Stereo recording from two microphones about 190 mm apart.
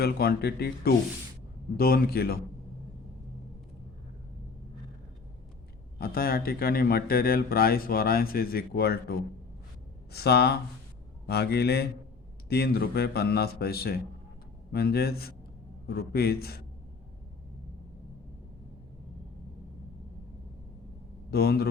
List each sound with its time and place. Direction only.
0.0 s a man's voice: 55° left (ahead or behind)
6.0 s a man's voice: 50° left (ahead or behind)
21.2 s a man's voice: 55° left (ahead or behind)